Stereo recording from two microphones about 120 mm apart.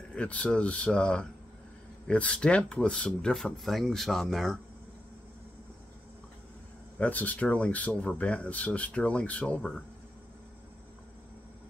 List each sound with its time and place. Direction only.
0.1 s speech: 10° left (ahead or behind)
7.0 s speech: 15° left (ahead or behind)